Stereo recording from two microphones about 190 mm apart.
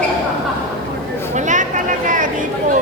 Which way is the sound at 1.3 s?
40° right (ahead or behind).